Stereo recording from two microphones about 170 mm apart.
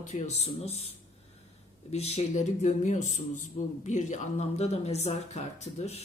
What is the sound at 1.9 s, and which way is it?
A man's voice, 40° left (ahead or behind).